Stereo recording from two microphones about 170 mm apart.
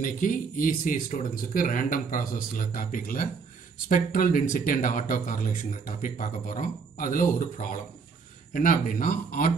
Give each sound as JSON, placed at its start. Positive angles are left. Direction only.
{"t": 0.0, "sound": "speech", "side_deg": 50}